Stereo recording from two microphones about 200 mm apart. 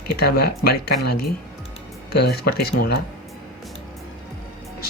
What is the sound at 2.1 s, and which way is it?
Speech, 50° left (ahead or behind).